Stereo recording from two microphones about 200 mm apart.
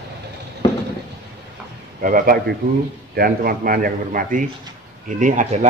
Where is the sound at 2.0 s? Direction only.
45° right (ahead or behind).